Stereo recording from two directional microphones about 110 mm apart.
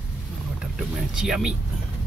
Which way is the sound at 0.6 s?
5° right (ahead or behind).